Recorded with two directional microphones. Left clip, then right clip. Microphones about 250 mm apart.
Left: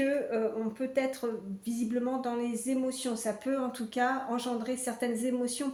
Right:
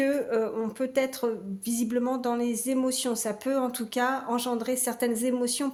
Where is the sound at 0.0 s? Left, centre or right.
Right.